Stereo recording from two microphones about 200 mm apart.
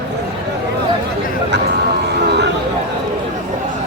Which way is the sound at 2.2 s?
55° right (ahead or behind).